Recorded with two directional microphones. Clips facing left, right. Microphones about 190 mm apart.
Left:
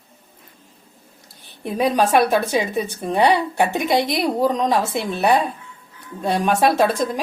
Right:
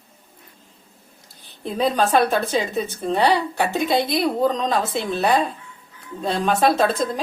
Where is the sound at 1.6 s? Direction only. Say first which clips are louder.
Left 2 dB; 15° left (ahead or behind).